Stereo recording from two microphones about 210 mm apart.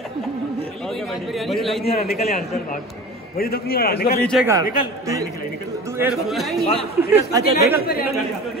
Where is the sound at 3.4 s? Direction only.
45° left (ahead or behind).